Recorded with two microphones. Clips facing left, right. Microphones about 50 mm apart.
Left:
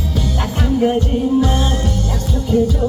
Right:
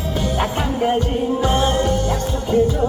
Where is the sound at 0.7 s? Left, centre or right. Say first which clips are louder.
Left 3 dB; centre.